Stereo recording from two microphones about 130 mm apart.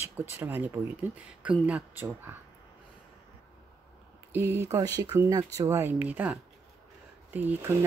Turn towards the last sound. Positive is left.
turn(degrees=-15)  # may be behind; listen again after turning